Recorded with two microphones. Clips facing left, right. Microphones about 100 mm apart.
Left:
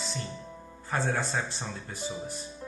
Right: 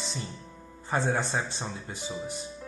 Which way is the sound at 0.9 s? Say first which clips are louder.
Right 2 dB; 20° right (ahead or behind).